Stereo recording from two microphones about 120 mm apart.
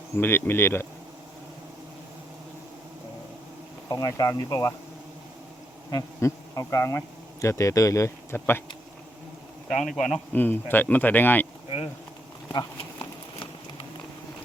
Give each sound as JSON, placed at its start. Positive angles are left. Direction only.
{"t": 0.2, "sound": "speech", "side_deg": 20}
{"t": 3.8, "sound": "speech", "side_deg": 30}
{"t": 5.9, "sound": "speech", "side_deg": 25}
{"t": 9.6, "sound": "speech", "side_deg": 0}
{"t": 10.3, "sound": "speech", "side_deg": 15}
{"t": 12.5, "sound": "insect", "side_deg": 40}